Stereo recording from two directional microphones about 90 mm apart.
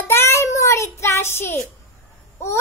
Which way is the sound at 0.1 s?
30° left (ahead or behind).